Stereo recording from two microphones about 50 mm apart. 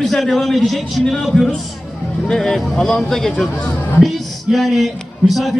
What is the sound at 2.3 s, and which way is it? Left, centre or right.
A man's voice, centre.